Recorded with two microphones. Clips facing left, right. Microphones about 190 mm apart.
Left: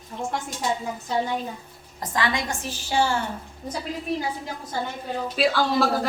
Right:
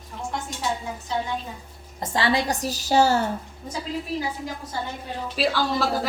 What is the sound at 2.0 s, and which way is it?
A woman's voice, 30° right (ahead or behind).